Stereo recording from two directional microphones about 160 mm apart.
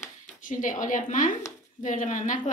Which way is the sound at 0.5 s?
55° left (ahead or behind).